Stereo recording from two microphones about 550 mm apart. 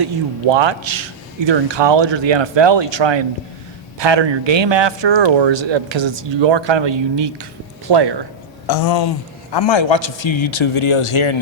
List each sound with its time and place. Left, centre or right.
0.5 s a man's voice: right
8.6 s a man's voice: left